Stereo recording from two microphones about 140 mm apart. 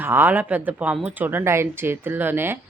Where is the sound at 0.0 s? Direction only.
15° right (ahead or behind).